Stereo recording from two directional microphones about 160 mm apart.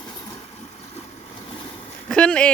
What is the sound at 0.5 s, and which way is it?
Vehicle, 40° left (ahead or behind).